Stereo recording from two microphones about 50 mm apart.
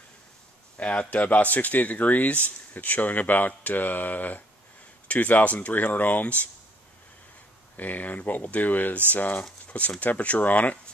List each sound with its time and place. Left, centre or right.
0.7 s speech: left
7.7 s speech: left